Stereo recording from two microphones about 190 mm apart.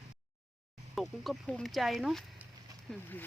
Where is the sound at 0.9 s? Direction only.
Centre (ahead or behind).